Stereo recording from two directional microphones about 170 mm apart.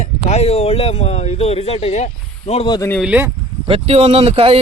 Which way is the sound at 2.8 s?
10° left (ahead or behind).